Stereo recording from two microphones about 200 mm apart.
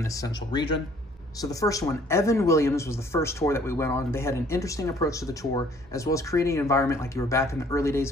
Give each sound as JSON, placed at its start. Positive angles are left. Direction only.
{"t": 0.0, "sound": "speech", "side_deg": 20}